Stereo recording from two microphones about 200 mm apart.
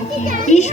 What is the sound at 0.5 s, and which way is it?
Speech, 35° left (ahead or behind).